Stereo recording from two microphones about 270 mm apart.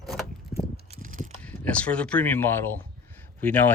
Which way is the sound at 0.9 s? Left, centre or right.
Right.